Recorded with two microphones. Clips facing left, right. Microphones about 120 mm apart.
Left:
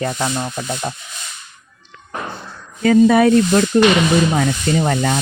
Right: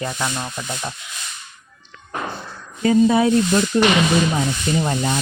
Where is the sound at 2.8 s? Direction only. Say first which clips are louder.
Left 4 dB; 80° left.